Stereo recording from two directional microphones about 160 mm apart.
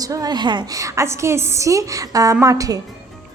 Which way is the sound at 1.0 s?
15° right (ahead or behind).